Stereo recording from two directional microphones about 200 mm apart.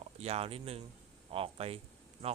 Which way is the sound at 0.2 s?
30° right (ahead or behind).